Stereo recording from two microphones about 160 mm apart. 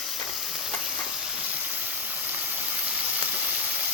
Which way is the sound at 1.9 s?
10° right (ahead or behind).